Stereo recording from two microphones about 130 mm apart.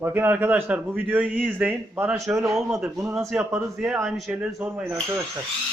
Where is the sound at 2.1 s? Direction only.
25° right (ahead or behind).